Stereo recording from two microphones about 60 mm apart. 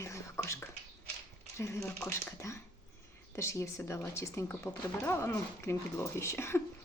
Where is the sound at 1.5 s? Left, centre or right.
Left.